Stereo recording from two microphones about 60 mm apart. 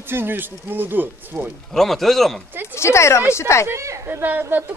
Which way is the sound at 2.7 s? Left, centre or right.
Left.